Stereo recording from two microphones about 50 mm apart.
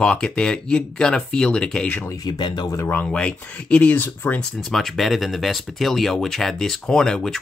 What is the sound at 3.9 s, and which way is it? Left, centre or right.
Speech, left.